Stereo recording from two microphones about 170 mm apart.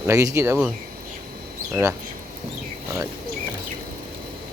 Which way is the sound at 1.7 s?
15° right (ahead or behind).